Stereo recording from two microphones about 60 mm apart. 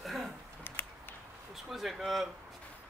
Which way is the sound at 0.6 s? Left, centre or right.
Left.